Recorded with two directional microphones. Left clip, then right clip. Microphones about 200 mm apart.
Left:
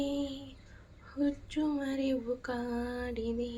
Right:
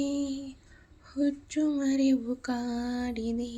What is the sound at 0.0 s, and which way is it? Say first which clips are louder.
Female singing: right 3 dB; 45° right (ahead or behind).